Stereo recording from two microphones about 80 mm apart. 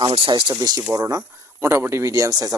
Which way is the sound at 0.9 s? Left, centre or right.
Right.